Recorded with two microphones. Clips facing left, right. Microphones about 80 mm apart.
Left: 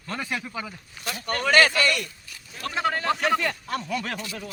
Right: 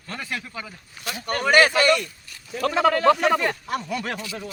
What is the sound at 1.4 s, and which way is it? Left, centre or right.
Speech, centre.